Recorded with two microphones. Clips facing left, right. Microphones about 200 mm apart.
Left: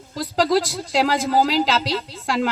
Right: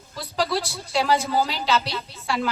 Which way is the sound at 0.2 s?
90° left.